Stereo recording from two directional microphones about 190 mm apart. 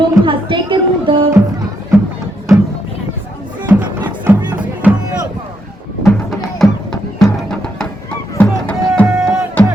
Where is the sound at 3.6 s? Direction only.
10° right (ahead or behind).